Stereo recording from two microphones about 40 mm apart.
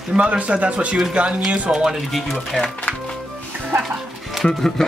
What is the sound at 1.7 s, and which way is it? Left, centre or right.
Speech, centre.